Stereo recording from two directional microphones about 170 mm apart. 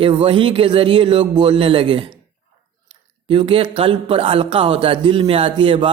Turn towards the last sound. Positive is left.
turn(degrees=-30)  # may be behind; listen again after turning